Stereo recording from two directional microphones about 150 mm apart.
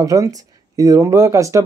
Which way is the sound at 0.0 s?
20° right (ahead or behind).